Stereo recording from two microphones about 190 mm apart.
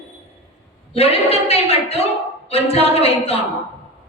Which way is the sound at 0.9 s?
30° left (ahead or behind).